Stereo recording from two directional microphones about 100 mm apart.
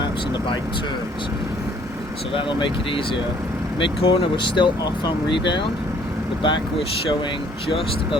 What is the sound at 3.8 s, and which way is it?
Speech, 65° left (ahead or behind).